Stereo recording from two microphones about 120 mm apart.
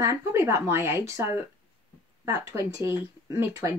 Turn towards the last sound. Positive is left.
turn(degrees=-25)  # may be behind; listen again after turning